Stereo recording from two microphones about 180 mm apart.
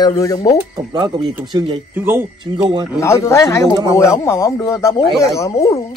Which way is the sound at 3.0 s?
15° left (ahead or behind).